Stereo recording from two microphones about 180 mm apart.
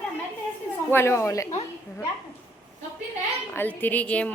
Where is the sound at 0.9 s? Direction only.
15° left (ahead or behind).